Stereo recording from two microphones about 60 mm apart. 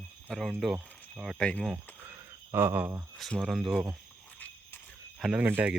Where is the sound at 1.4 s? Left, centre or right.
Centre.